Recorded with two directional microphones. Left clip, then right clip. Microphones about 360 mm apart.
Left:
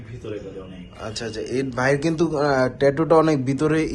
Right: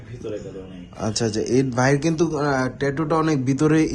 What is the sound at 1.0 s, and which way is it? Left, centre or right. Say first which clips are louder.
A man's voice: right 5 dB; centre.